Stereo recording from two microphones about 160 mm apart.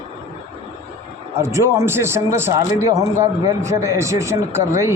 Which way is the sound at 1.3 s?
15° right (ahead or behind).